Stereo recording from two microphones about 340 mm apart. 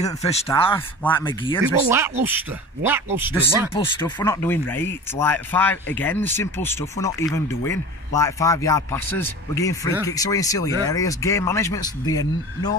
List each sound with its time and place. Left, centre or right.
0.0 s speech: centre
1.9 s speech: centre
3.7 s speech: centre